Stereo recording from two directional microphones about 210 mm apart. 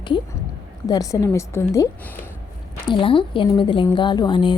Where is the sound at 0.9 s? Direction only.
15° left (ahead or behind).